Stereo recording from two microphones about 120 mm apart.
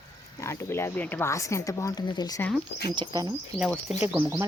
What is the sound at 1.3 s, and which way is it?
Speech, 25° left (ahead or behind).